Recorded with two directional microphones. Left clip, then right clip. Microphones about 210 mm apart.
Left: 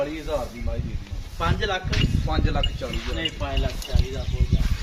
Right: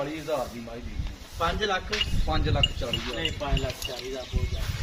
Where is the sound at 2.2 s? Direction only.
20° left (ahead or behind).